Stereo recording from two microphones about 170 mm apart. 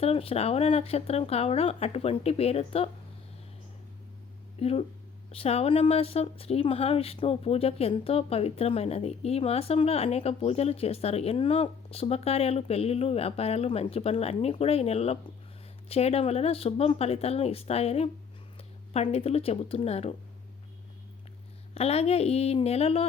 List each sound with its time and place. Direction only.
0.0 s speech: 35° left (ahead or behind)
4.6 s speech: 35° left (ahead or behind)
21.8 s speech: 35° left (ahead or behind)